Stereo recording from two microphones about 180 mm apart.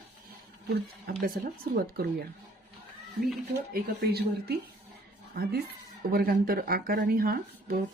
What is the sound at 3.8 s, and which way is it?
Speech, 60° right (ahead or behind).